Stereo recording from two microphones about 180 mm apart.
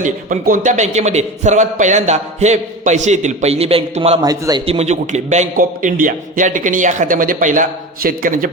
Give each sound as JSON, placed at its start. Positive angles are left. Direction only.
{"t": 0.0, "sound": "a man's voice", "side_deg": -45}
{"t": 4.2, "sound": "a man's voice", "side_deg": -20}
{"t": 4.6, "sound": "a man's voice", "side_deg": -35}